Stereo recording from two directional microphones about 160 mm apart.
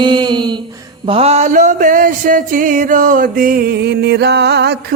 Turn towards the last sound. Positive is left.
turn(degrees=-90)